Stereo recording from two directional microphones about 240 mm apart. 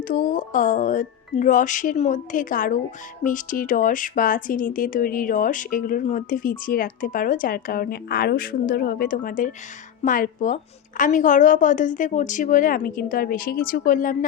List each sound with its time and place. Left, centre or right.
0.1 s speech: left